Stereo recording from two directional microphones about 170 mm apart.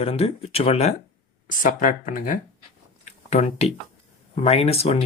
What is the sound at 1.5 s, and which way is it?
Speech, 50° left (ahead or behind).